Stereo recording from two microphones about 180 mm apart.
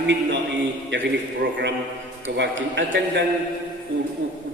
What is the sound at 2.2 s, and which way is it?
A man's voice, 85° right.